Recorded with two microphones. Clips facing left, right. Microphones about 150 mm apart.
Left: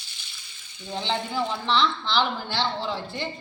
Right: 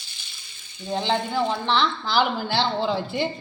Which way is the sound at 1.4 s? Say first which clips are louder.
Right 4 dB; 35° right (ahead or behind).